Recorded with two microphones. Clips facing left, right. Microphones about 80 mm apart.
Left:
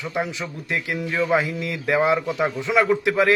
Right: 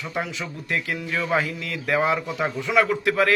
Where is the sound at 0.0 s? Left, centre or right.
Centre.